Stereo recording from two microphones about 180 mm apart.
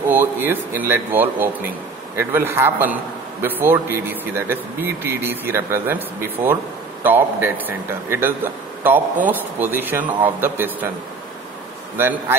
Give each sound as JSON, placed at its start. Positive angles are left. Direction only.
{"t": 0.1, "sound": "speech", "side_deg": -10}
{"t": 12.0, "sound": "speech", "side_deg": -10}